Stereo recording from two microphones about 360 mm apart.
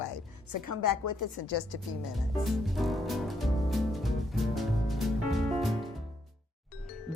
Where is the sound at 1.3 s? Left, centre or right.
Left.